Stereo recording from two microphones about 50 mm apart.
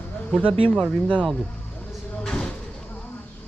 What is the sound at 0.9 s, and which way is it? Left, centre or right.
Speech, left.